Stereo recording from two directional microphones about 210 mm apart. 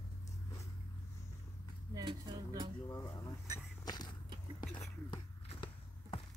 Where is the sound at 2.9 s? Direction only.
15° left (ahead or behind).